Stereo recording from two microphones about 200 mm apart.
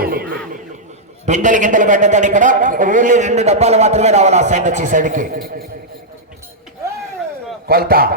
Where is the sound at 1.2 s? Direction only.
40° right (ahead or behind).